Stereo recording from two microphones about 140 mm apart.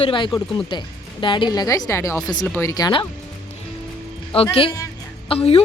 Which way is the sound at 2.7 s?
30° left (ahead or behind).